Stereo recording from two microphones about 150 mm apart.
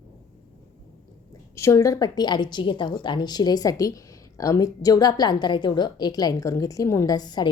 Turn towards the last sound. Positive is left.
turn(degrees=30)  # may be behind; listen again after turning